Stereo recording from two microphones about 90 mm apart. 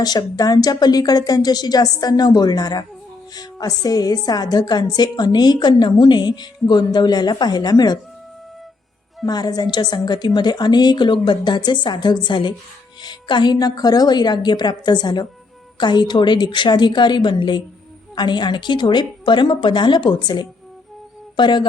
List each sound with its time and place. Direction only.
0.0 s a woman's voice: 50° left (ahead or behind)
9.2 s a woman's voice: 50° left (ahead or behind)